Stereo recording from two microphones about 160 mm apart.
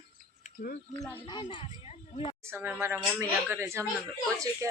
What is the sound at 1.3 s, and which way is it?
Speech, 30° left (ahead or behind).